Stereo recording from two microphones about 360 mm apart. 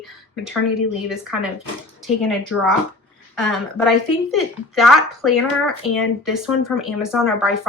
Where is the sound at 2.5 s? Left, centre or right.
Left.